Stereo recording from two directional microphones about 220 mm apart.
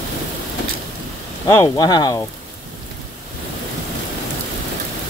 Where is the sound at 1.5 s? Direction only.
15° left (ahead or behind).